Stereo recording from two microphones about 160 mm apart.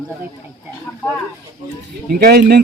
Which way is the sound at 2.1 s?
75° right (ahead or behind).